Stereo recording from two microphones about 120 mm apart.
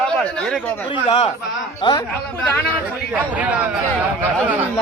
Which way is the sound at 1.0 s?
50° left (ahead or behind).